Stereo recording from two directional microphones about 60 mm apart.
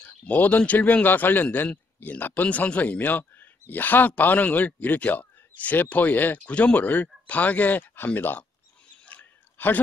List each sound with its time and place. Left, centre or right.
0.0 s speech: left
6.4 s speech: left
9.0 s a sound: left